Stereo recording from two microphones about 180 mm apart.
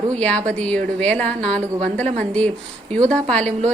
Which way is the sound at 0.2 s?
5° left (ahead or behind).